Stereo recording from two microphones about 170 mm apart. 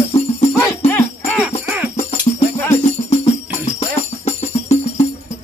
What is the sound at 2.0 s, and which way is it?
Music, 40° left (ahead or behind).